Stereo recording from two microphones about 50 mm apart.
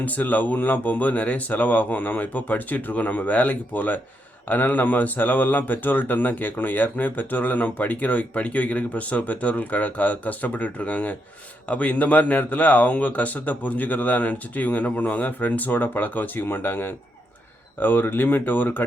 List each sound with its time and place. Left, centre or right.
0.0 s speech: left